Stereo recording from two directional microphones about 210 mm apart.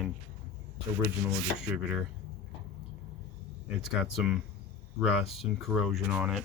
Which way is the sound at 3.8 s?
5° right (ahead or behind).